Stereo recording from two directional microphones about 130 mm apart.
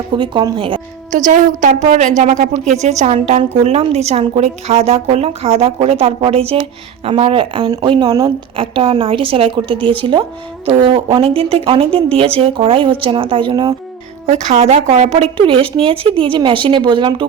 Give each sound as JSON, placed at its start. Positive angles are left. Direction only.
{"t": 0.1, "sound": "speech", "side_deg": -35}
{"t": 1.1, "sound": "a woman's voice", "side_deg": -75}
{"t": 8.5, "sound": "a woman's voice", "side_deg": -45}
{"t": 14.3, "sound": "a woman's voice", "side_deg": -60}